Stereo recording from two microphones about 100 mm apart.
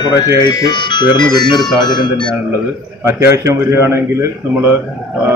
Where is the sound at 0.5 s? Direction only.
45° left (ahead or behind).